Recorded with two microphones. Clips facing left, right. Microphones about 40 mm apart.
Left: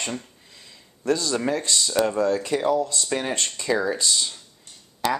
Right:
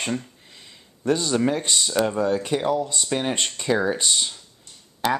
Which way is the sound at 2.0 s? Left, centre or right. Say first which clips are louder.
Left 1 dB; centre.